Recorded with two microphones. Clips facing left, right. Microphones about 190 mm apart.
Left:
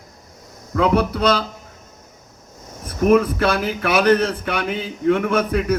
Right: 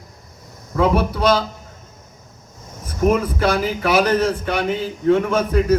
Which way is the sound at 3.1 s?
60° left (ahead or behind).